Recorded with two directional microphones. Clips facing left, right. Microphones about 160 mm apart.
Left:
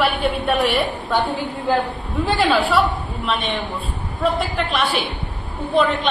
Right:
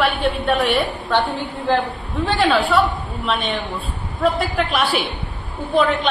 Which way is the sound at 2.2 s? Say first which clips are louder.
Even; centre (ahead or behind).